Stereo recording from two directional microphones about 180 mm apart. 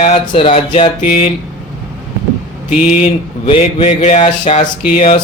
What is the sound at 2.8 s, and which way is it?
Speech, 40° left (ahead or behind).